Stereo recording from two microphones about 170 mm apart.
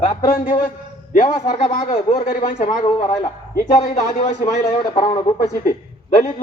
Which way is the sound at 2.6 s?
40° left (ahead or behind).